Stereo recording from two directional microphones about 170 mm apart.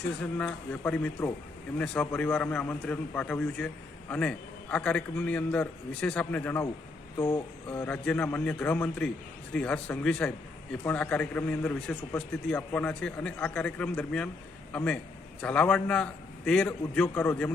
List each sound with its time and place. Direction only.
0.2 s a man's voice: 5° left (ahead or behind)